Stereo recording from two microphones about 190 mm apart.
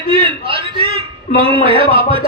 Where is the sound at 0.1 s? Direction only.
30° right (ahead or behind).